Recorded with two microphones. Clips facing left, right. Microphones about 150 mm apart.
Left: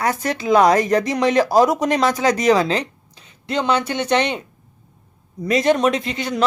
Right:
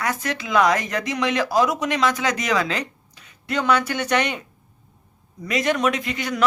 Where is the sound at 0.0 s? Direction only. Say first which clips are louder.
Left 5 dB; 35° left (ahead or behind).